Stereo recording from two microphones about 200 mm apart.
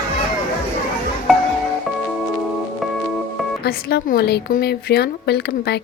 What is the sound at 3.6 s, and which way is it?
A woman's voice, 55° left (ahead or behind).